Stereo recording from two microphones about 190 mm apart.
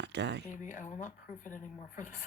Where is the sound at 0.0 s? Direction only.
65° right (ahead or behind).